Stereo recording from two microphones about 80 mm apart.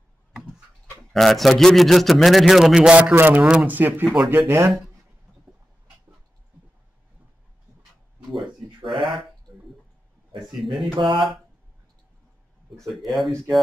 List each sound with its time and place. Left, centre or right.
1.1 s a man's voice: centre
3.2 s speech: right
8.3 s a sound: centre
10.6 s a man's voice: centre
11.0 s speech: right
12.7 s a man's voice: centre